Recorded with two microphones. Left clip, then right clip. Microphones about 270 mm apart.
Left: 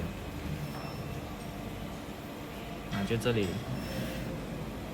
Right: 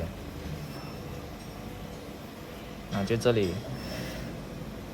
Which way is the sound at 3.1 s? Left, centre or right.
Right.